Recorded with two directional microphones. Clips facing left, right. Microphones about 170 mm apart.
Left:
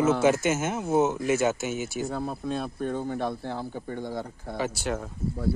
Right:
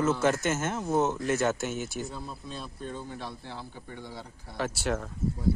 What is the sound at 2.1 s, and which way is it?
Speech, 60° left (ahead or behind).